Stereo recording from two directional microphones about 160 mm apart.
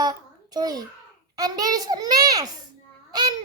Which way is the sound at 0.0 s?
25° right (ahead or behind).